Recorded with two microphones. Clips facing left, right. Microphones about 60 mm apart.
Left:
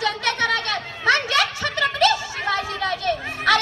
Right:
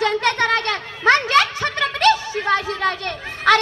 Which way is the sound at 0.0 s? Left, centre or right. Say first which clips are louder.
Right 4 dB; right.